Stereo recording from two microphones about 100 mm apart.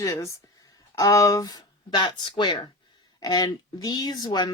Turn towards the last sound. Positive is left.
turn(degrees=45)  # may be behind; listen again after turning